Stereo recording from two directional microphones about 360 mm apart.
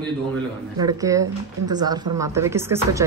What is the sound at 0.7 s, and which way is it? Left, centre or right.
Speech, centre.